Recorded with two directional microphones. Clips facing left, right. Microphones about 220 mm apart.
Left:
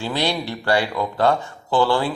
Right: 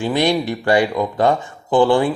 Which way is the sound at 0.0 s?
15° right (ahead or behind).